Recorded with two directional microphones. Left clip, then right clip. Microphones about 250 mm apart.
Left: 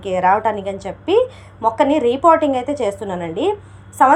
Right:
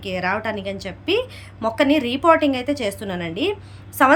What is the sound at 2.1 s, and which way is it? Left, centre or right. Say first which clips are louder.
A woman's voice: left 3 dB; centre.